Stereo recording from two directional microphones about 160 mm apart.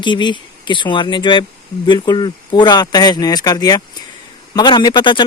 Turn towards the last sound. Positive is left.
turn(degrees=30)  # may be behind; listen again after turning